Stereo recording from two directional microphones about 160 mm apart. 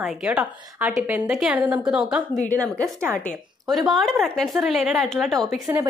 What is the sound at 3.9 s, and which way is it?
Speech, centre (ahead or behind).